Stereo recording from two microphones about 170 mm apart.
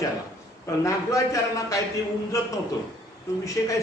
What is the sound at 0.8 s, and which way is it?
A man's voice, 20° left (ahead or behind).